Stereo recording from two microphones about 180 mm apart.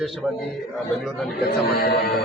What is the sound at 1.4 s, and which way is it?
Speech, 60° left (ahead or behind).